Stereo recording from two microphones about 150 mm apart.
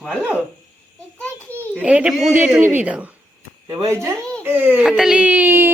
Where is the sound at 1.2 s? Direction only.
10° left (ahead or behind).